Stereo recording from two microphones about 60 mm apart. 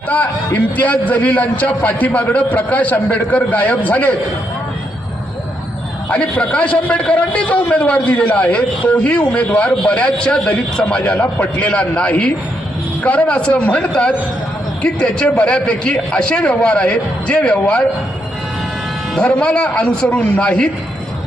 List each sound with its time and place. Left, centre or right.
0.1 s a man's voice: left
6.1 s a man's voice: left
19.1 s a man's voice: centre